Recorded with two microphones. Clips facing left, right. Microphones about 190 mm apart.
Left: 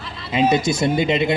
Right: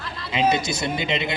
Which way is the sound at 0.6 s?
50° left (ahead or behind).